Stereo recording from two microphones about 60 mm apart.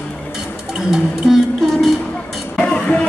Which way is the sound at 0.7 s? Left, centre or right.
Centre.